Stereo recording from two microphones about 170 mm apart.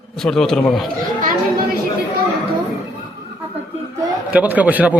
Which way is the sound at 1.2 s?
55° right (ahead or behind).